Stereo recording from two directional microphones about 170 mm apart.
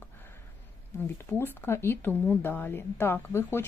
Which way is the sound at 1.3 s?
10° left (ahead or behind).